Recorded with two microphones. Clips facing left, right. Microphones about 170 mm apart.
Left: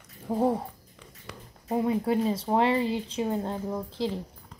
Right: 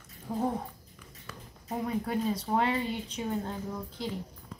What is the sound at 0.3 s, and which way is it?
Speech, 20° left (ahead or behind).